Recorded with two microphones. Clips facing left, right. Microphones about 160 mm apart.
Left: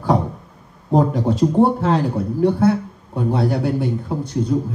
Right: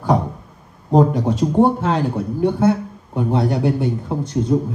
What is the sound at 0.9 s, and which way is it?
Speech, centre (ahead or behind).